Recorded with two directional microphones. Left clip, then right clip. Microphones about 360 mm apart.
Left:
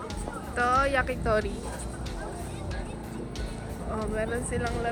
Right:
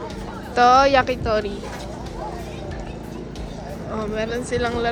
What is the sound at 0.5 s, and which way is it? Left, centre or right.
Speech, centre.